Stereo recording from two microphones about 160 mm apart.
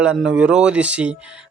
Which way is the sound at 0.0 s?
5° right (ahead or behind).